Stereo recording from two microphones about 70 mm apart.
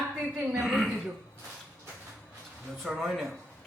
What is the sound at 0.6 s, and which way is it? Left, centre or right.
Speech, centre.